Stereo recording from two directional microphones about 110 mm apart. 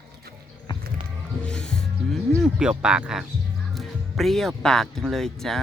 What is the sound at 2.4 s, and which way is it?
Speech, 10° right (ahead or behind).